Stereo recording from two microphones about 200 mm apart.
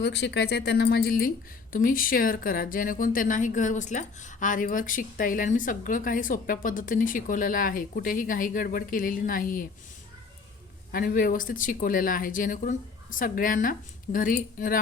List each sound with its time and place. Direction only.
0.0 s speech: 55° left (ahead or behind)
10.9 s speech: 45° left (ahead or behind)